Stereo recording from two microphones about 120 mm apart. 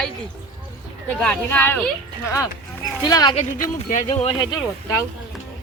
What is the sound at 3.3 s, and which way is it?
Speech, 90° left.